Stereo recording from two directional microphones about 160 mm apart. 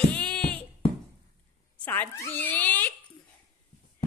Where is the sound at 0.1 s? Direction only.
5° left (ahead or behind).